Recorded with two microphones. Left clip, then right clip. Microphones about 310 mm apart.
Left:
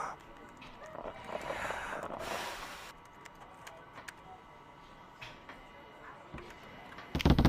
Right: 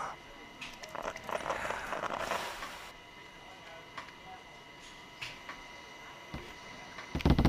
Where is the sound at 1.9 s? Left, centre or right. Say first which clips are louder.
Right 4 dB; right.